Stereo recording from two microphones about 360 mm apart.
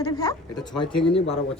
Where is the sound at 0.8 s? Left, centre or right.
Left.